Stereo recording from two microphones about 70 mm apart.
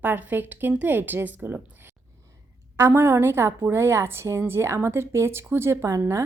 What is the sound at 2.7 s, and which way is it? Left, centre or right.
A woman's voice, right.